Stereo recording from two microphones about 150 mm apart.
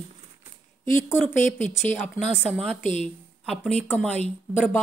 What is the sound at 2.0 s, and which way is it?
Speech, centre (ahead or behind).